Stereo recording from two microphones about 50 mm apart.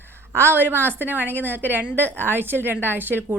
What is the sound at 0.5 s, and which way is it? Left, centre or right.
A woman's voice, right.